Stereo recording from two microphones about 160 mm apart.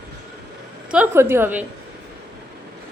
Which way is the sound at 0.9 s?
10° right (ahead or behind).